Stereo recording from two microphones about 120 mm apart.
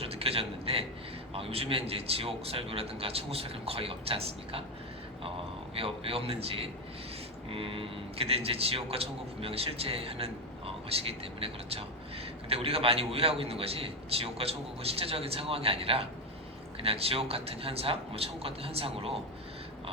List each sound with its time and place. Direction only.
0.0 s a man's voice: 55° right (ahead or behind)
5.7 s a man's voice: 55° right (ahead or behind)